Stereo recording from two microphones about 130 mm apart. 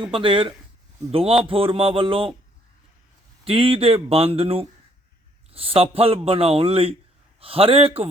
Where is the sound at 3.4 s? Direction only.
45° right (ahead or behind).